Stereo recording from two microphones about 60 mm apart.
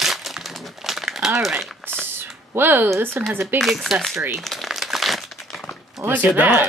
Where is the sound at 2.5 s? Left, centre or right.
Right.